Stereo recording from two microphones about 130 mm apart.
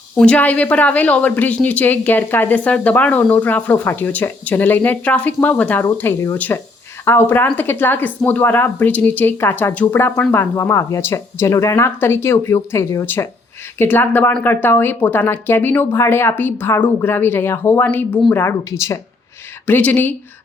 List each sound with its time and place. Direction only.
0.2 s speech: 10° left (ahead or behind)